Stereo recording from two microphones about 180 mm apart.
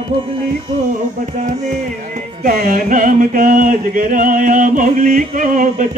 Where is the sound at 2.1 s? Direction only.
50° right (ahead or behind).